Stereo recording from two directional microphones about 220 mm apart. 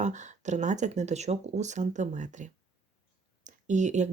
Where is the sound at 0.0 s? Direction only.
35° right (ahead or behind).